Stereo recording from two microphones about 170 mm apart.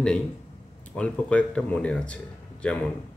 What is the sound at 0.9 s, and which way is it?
Speech, 5° left (ahead or behind).